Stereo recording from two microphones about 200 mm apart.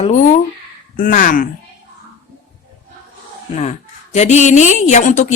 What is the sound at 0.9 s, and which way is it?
Speech, 40° left (ahead or behind).